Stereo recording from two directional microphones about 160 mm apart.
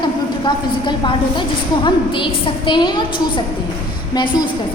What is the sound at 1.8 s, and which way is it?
A woman's voice, 30° left (ahead or behind).